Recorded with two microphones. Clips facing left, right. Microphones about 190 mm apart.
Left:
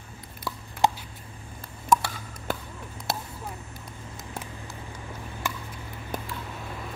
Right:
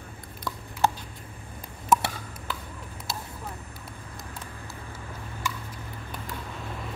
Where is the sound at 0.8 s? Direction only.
15° left (ahead or behind).